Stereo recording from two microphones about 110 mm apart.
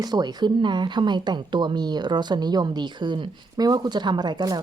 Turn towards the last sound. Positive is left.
turn(degrees=-40)  # may be behind; listen again after turning